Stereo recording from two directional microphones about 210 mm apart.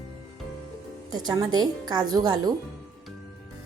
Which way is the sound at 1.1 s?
20° right (ahead or behind).